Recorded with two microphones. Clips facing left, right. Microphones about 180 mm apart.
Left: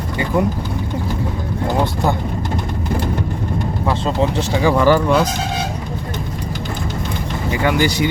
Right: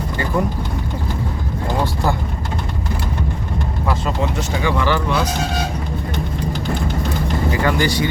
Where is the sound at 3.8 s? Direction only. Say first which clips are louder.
Left 3 dB; 30° left (ahead or behind).